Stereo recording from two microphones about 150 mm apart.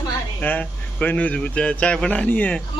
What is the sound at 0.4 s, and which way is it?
Speech, 10° left (ahead or behind).